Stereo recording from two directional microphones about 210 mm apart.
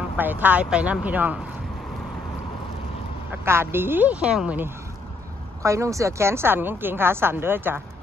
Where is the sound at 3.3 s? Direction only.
10° right (ahead or behind).